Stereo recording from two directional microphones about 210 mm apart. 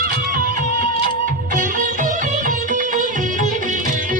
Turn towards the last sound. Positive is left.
turn(degrees=-35)  # may be behind; listen again after turning